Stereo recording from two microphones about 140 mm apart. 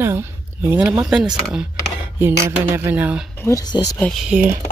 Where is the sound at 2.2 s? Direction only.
15° right (ahead or behind).